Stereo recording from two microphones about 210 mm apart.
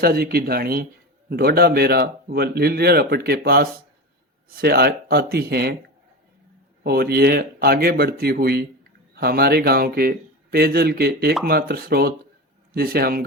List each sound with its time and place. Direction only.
0.0 s speech: 45° right (ahead or behind)
6.8 s speech: 50° right (ahead or behind)